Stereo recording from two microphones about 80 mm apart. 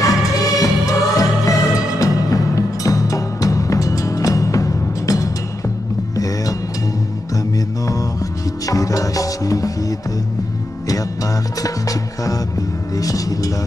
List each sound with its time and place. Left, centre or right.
0.0 s music: left
7.5 s music: left
11.6 s music: left